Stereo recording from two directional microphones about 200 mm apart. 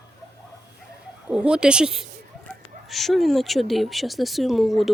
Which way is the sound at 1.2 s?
5° right (ahead or behind).